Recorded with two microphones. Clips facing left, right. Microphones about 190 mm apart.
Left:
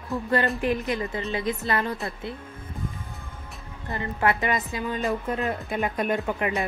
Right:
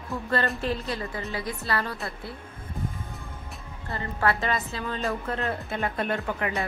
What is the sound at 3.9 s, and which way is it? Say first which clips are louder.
A woman's voice: left 2 dB; 15° left (ahead or behind).